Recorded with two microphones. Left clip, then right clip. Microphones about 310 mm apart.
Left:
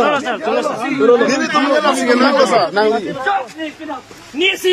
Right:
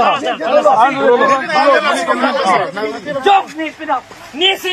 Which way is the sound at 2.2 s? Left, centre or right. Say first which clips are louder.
Left 3 dB; right.